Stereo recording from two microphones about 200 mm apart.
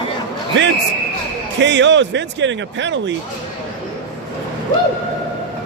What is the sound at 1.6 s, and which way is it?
A man's voice, 65° right (ahead or behind).